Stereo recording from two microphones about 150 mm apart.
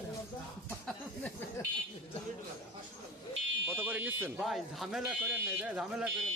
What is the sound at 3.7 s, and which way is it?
Speech, 10° right (ahead or behind).